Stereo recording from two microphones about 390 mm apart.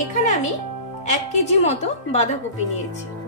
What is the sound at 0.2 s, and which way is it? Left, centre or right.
Music, centre.